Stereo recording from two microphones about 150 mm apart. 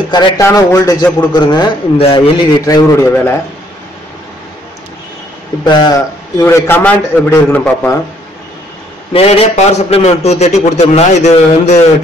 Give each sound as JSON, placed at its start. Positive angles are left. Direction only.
{"t": 0.1, "sound": "speech", "side_deg": 20}
{"t": 2.0, "sound": "speech", "side_deg": 40}
{"t": 2.6, "sound": "speech", "side_deg": 20}
{"t": 5.6, "sound": "a man's voice", "side_deg": 30}
{"t": 9.1, "sound": "a man's voice", "side_deg": 40}